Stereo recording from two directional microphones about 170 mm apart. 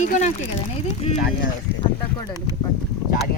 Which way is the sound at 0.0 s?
45° left (ahead or behind).